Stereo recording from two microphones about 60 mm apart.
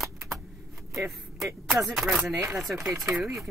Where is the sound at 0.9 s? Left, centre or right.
Centre.